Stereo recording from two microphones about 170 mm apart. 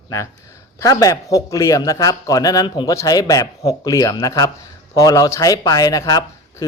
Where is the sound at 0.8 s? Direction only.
20° left (ahead or behind).